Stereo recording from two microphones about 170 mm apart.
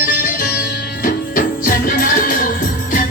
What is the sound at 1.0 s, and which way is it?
Music, 55° left (ahead or behind).